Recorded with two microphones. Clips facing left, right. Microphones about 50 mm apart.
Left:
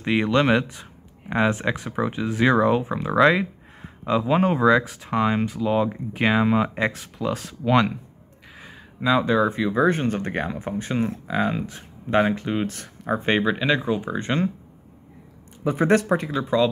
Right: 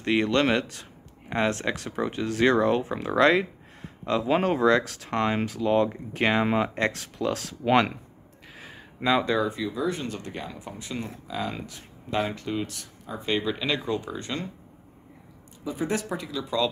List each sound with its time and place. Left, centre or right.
0.0 s speech: centre
7.6 s speech: centre
8.5 s a sound: centre
9.2 s speech: centre
9.5 s speech: left
13.5 s speech: centre
14.1 s speech: left
15.6 s speech: left